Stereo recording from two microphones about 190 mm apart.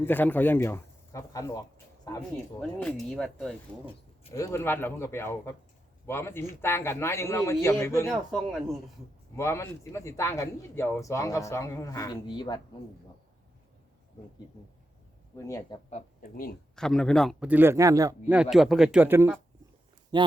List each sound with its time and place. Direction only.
0.0 s speech: 10° left (ahead or behind)
2.6 s speech: 5° left (ahead or behind)
4.4 s speech: 15° left (ahead or behind)
8.0 s speech: centre (ahead or behind)
9.3 s speech: 15° left (ahead or behind)
15.4 s speech: 15° left (ahead or behind)
15.9 s speech: 40° left (ahead or behind)
16.7 s speech: 5° left (ahead or behind)
17.5 s speech: 10° right (ahead or behind)
18.5 s speech: centre (ahead or behind)
20.1 s speech: 20° right (ahead or behind)